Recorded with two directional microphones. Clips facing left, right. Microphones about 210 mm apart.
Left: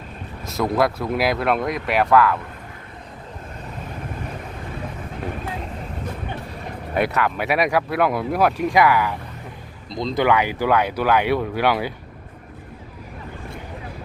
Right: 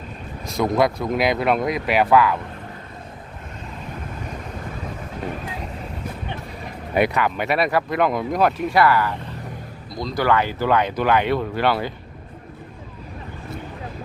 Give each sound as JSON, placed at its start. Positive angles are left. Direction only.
{"t": 0.4, "sound": "speech", "side_deg": 5}
{"t": 6.9, "sound": "speech", "side_deg": 0}